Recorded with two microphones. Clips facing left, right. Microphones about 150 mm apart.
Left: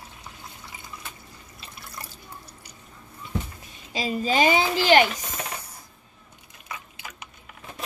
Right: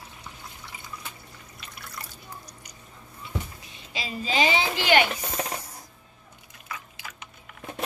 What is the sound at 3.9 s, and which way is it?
A woman's voice, 45° left (ahead or behind).